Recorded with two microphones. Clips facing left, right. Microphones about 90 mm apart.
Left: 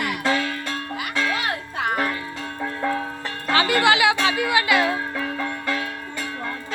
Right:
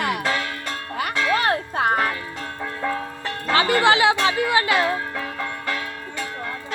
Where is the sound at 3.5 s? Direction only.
30° right (ahead or behind).